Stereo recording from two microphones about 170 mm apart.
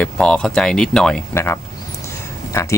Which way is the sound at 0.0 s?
5° left (ahead or behind).